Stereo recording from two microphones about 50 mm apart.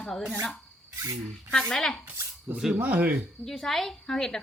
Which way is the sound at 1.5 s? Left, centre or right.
Centre.